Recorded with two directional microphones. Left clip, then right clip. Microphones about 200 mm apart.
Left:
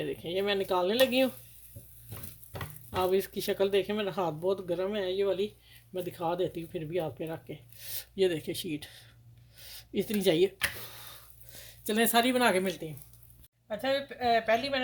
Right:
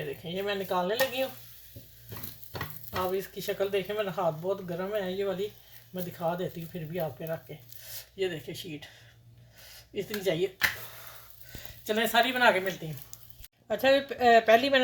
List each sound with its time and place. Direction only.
0.3 s speech: 60° left (ahead or behind)
2.9 s speech: 60° left (ahead or behind)
11.5 s speech: 60° left (ahead or behind)
13.7 s speech: 45° right (ahead or behind)